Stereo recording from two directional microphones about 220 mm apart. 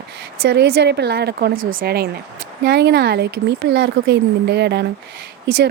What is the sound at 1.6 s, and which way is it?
Speech, 60° right (ahead or behind).